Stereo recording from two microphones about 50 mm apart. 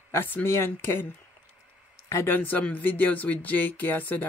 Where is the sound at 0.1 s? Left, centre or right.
Left.